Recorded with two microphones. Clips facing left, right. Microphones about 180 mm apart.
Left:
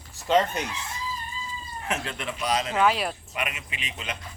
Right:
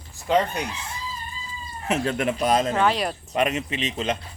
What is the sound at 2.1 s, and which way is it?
Speech, 45° right (ahead or behind).